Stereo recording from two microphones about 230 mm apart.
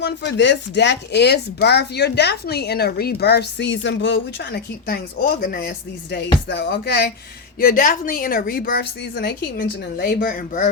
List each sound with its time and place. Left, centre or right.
0.0 s speech: left